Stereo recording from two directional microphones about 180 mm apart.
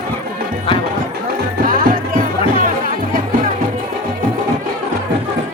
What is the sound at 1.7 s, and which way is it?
Music, 50° right (ahead or behind).